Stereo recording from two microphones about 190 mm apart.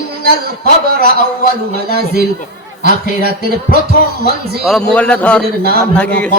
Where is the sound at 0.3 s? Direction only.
55° right (ahead or behind).